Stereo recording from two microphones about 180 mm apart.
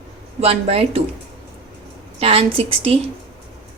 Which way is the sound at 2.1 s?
35° right (ahead or behind).